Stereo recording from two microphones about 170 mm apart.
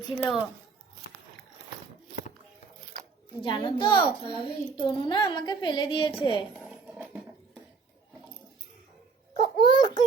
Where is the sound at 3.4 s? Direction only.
25° left (ahead or behind).